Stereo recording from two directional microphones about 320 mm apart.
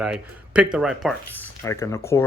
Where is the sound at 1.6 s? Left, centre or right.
Centre.